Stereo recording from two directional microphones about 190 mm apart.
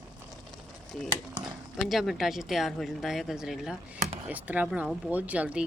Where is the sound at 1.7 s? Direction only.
Centre (ahead or behind).